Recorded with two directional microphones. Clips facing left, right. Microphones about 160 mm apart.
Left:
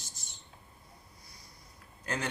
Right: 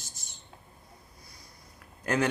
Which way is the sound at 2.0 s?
60° right (ahead or behind).